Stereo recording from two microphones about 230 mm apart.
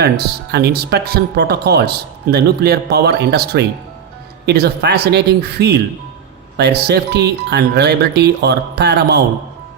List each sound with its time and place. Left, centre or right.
0.5 s speech: right